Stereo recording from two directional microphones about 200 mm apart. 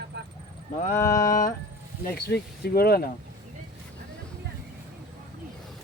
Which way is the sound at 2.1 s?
50° left (ahead or behind).